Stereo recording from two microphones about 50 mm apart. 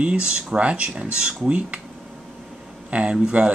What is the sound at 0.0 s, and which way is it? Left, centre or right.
Speech, right.